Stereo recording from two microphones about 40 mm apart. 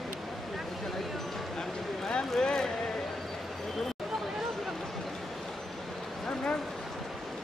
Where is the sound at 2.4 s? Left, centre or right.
Centre.